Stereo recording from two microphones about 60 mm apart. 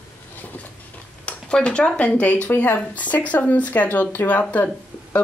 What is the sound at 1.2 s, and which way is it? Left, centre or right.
Speech, centre.